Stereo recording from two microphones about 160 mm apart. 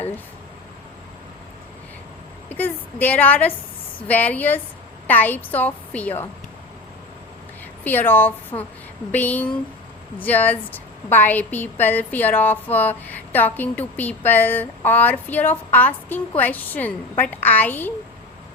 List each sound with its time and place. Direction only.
2.5 s a woman's voice: 10° left (ahead or behind)
7.9 s a woman's voice: 10° left (ahead or behind)